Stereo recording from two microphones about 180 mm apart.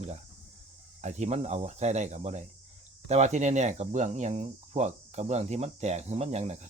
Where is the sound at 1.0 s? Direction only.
40° right (ahead or behind).